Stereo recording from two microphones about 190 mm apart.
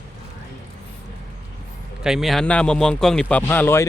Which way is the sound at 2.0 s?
Centre (ahead or behind).